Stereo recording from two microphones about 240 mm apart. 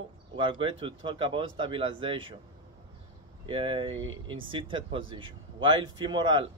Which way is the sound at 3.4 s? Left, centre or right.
Right.